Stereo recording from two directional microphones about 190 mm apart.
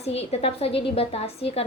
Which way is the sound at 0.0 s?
35° left (ahead or behind).